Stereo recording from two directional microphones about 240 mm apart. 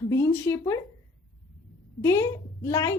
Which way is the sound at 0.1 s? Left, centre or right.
Centre.